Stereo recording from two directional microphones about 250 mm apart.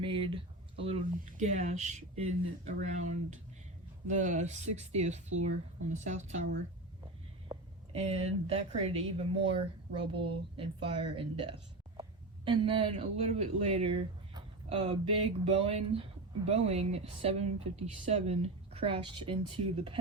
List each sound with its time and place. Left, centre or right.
0.0 s speech: centre
7.4 s speech: right
12.5 s speech: right